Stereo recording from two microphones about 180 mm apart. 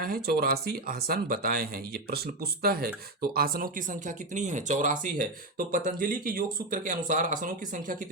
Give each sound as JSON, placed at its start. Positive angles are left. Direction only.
{"t": 0.0, "sound": "speech", "side_deg": -60}